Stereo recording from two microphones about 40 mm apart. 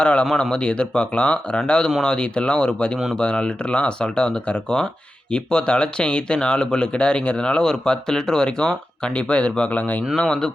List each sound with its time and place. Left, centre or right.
0.0 s speech: left
9.1 s speech: left
9.7 s speech: left
10.2 s speech: centre